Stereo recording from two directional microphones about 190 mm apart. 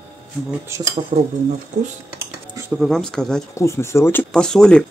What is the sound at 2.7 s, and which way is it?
Speech, centre (ahead or behind).